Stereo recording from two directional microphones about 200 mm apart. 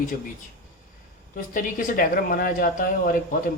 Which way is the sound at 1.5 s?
45° left (ahead or behind).